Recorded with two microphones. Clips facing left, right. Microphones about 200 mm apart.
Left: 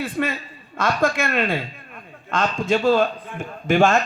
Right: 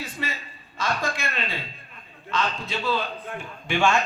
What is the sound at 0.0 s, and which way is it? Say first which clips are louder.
A man's voice: left 9 dB; 55° left (ahead or behind).